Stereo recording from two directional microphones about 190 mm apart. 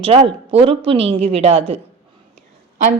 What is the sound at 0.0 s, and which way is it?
A woman's voice, 30° right (ahead or behind).